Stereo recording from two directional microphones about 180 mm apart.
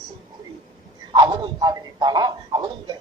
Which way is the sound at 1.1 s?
25° right (ahead or behind).